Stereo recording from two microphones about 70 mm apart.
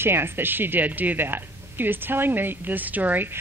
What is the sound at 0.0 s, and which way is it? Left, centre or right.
Speech, right.